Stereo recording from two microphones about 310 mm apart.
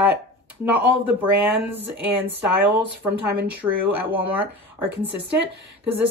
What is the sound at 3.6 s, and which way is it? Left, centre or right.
Speech, centre.